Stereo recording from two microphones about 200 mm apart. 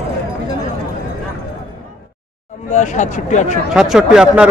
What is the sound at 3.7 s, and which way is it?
Speech, 5° right (ahead or behind).